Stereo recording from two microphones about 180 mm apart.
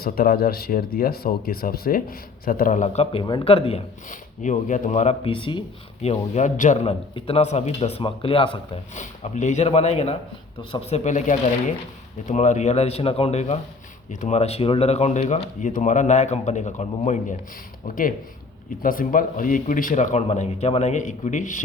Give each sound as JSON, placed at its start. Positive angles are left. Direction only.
{"t": 0.0, "sound": "speech", "side_deg": 55}